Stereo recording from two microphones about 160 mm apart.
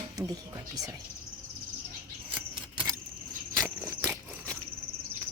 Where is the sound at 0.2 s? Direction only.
20° right (ahead or behind).